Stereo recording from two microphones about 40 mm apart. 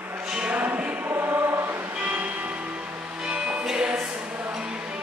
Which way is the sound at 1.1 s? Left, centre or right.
Right.